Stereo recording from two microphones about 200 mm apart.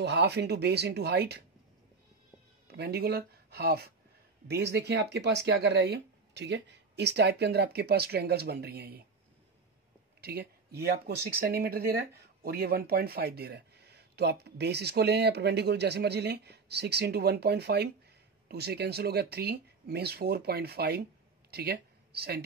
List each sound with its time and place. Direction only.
0.0 s speech: 55° right (ahead or behind)
2.7 s speech: 55° right (ahead or behind)
10.2 s speech: 55° right (ahead or behind)